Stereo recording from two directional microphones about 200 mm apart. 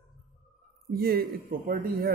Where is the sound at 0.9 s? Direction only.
50° right (ahead or behind).